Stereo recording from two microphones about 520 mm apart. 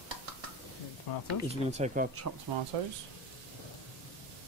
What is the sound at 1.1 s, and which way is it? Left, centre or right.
Speech, left.